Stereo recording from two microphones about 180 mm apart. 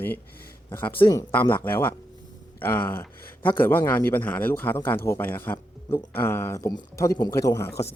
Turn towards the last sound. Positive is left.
turn(degrees=15)  # may be behind; listen again after turning